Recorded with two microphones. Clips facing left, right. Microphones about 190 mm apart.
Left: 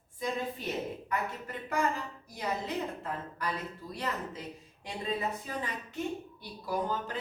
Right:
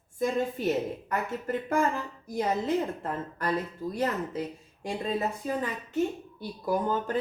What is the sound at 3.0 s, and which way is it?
A woman's voice, 50° right (ahead or behind).